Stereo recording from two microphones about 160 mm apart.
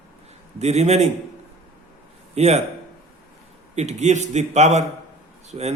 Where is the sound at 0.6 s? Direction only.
45° right (ahead or behind).